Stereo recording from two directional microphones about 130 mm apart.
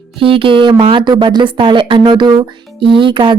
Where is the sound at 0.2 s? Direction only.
45° right (ahead or behind).